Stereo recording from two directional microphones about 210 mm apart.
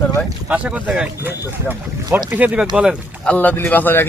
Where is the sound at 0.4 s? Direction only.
5° right (ahead or behind).